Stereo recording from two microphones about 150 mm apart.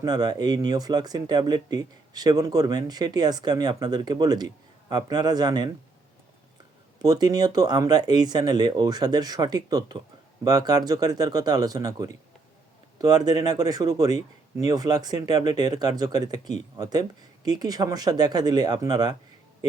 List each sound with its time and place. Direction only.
0.0 s speech: 25° right (ahead or behind)
7.0 s speech: 25° right (ahead or behind)